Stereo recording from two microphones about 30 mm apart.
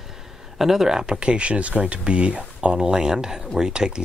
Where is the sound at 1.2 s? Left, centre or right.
Right.